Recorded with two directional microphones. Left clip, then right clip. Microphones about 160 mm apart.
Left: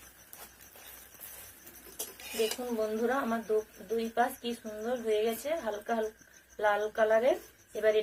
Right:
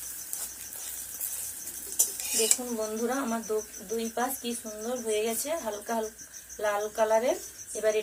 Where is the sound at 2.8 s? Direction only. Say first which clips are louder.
Even; 20° left (ahead or behind).